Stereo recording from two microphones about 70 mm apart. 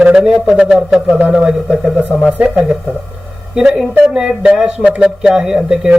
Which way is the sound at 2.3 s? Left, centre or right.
Centre.